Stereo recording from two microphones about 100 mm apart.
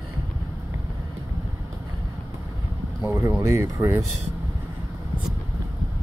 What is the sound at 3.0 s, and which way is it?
Speech, 25° right (ahead or behind).